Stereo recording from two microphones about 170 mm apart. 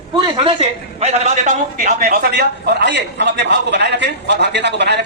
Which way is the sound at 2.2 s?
75° right (ahead or behind).